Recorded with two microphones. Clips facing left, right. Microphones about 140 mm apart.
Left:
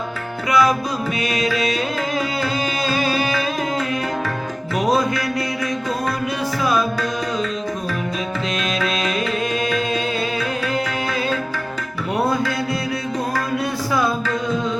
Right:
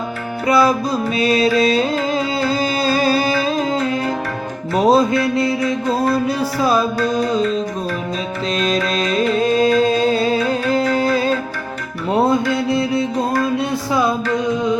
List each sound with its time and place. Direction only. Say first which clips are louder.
0.4 s music: right 3 dB; 30° right (ahead or behind)
4.8 s music: right 6 dB; 30° right (ahead or behind)
8.6 s music: right 5 dB; 35° right (ahead or behind)
12.1 s music: right 5 dB; 25° right (ahead or behind)